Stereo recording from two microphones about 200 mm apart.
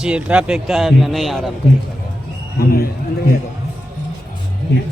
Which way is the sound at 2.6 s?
45° left (ahead or behind).